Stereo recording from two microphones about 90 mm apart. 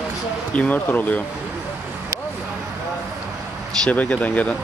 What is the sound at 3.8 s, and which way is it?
Speech, 15° left (ahead or behind).